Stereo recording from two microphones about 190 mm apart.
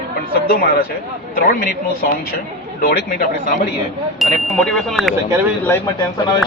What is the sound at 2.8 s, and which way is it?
Speech, 50° left (ahead or behind).